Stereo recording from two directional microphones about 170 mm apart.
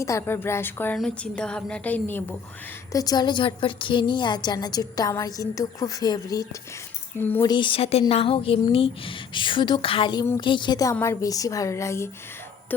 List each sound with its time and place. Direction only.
0.0 s a woman's voice: 15° left (ahead or behind)
2.9 s a woman's voice: 20° left (ahead or behind)
7.4 s a woman's voice: 25° left (ahead or behind)